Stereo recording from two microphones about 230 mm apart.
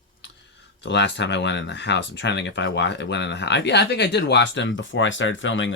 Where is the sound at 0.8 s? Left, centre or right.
Left.